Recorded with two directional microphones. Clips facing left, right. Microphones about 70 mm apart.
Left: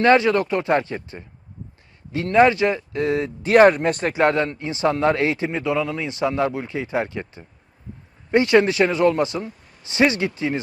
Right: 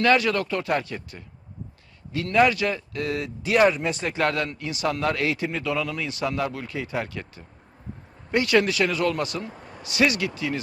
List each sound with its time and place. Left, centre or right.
0.0 s a man's voice: left
3.7 s speech: left
4.2 s a man's voice: left
9.6 s a sound: right
9.8 s a man's voice: left